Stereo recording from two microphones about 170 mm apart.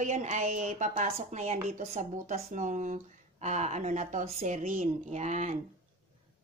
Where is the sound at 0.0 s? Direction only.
45° right (ahead or behind).